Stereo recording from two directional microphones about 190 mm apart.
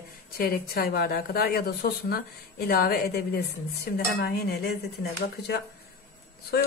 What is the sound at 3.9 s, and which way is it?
Cutlery, 55° left (ahead or behind).